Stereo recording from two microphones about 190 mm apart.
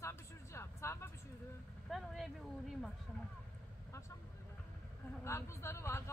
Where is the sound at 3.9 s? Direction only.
15° left (ahead or behind).